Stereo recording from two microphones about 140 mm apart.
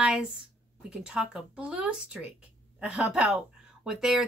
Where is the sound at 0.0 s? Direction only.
5° right (ahead or behind).